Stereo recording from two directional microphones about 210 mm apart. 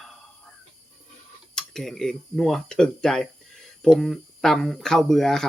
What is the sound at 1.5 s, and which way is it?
Speech, centre (ahead or behind).